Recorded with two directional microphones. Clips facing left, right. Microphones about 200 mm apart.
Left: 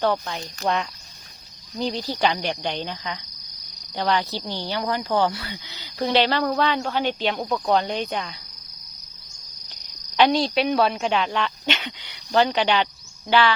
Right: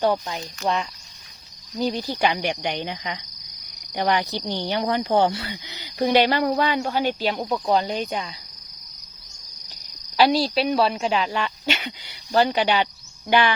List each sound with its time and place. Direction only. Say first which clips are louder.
0.0 s speech: right 1 dB; 10° right (ahead or behind)
1.8 s cricket: right 1 dB; 10° right (ahead or behind)
7.2 s speech: even; 5° right (ahead or behind)
10.2 s cricket: even; 5° right (ahead or behind)